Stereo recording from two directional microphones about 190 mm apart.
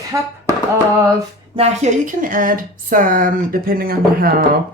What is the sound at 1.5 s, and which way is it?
Speech, 35° right (ahead or behind).